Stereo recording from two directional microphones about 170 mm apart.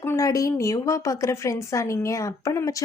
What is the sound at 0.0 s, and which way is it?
Speech, 15° left (ahead or behind).